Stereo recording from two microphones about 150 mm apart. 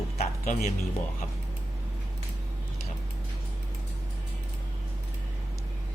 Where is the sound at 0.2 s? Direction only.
50° left (ahead or behind).